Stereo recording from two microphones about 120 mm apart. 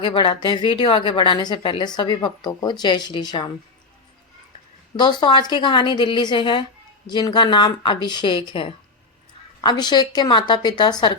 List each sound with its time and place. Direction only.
0.0 s a woman's voice: 40° left (ahead or behind)
4.9 s a woman's voice: 40° left (ahead or behind)